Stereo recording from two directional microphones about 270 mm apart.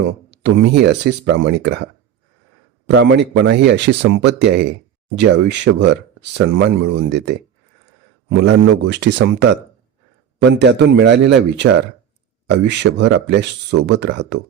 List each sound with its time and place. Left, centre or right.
0.3 s speech: right